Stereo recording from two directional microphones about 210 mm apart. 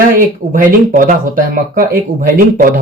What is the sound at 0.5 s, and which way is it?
Speech, 40° right (ahead or behind).